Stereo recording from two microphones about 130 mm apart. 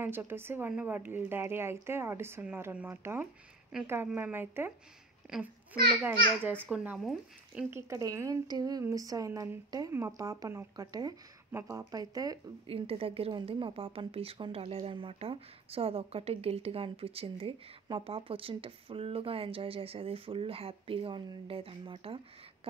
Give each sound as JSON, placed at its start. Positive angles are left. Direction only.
{"t": 0.0, "sound": "speech", "side_deg": -15}
{"t": 7.0, "sound": "speech", "side_deg": 0}
{"t": 7.7, "sound": "speech", "side_deg": -25}
{"t": 12.6, "sound": "a woman's voice", "side_deg": -45}